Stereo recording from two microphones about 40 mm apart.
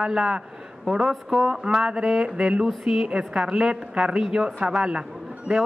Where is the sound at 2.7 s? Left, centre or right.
Centre.